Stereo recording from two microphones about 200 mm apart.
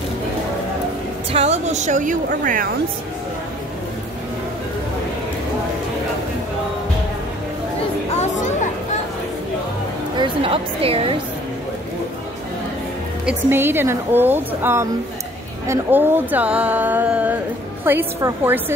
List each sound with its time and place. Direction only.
1.3 s a woman's voice: 35° right (ahead or behind)
10.1 s a woman's voice: 25° right (ahead or behind)
13.2 s speech: 5° right (ahead or behind)